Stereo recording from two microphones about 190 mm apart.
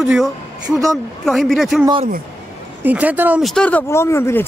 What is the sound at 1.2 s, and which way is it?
Speech, centre (ahead or behind).